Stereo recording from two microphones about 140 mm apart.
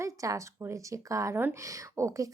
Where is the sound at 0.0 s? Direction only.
25° right (ahead or behind).